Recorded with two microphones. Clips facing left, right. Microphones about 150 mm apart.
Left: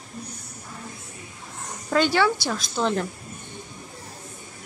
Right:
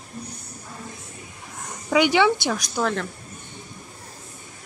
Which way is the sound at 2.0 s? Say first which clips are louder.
Right 2 dB; 20° right (ahead or behind).